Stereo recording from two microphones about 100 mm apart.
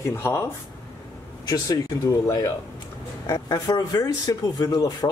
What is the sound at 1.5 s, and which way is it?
A man's voice, 35° left (ahead or behind).